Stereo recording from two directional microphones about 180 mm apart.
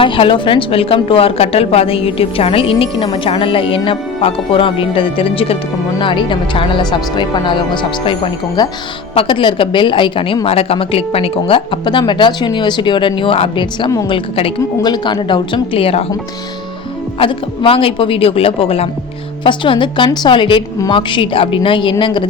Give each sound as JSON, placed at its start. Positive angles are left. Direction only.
{"t": 0.0, "sound": "a woman's voice", "side_deg": 30}
{"t": 17.2, "sound": "a woman's voice", "side_deg": 30}